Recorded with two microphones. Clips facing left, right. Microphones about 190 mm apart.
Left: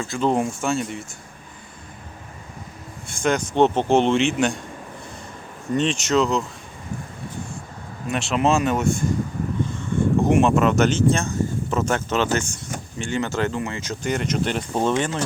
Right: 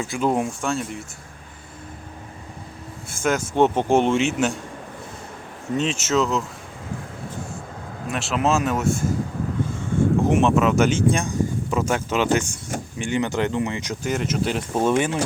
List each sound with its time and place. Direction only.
0.0 s a man's voice: 10° right (ahead or behind)
3.1 s a man's voice: 5° right (ahead or behind)
5.7 s a man's voice: 5° right (ahead or behind)
8.1 s a man's voice: centre (ahead or behind)
10.2 s speech: centre (ahead or behind)
14.0 s a man's voice: 5° right (ahead or behind)